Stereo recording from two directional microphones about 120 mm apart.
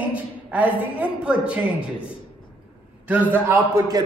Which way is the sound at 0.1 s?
10° right (ahead or behind).